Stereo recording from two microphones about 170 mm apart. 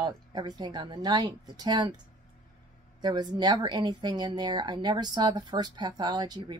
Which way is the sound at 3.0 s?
25° right (ahead or behind).